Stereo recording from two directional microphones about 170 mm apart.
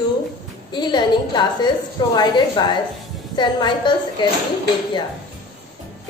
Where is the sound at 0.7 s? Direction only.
25° left (ahead or behind).